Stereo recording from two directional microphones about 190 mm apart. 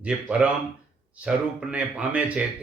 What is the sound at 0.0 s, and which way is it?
Speech, 5° right (ahead or behind).